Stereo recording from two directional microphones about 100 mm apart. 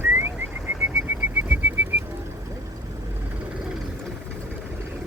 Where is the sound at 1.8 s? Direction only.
15° right (ahead or behind).